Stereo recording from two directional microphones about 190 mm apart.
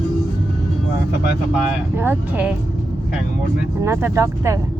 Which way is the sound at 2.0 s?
10° right (ahead or behind).